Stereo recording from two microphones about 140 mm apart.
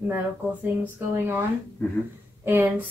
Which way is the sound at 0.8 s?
10° right (ahead or behind).